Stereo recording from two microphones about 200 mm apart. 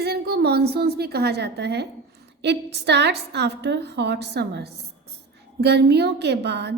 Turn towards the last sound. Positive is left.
turn(degrees=-55)  # may be behind; listen again after turning